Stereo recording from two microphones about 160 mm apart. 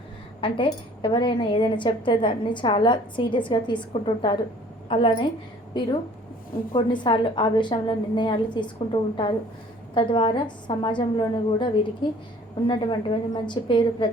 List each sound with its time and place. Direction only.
0.4 s a woman's voice: 30° left (ahead or behind)